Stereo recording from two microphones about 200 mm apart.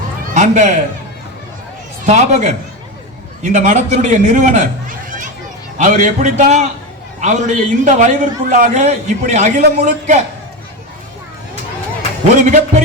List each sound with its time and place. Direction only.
0.3 s a man's voice: 35° right (ahead or behind)
2.0 s a man's voice: 35° right (ahead or behind)
12.3 s a man's voice: 40° right (ahead or behind)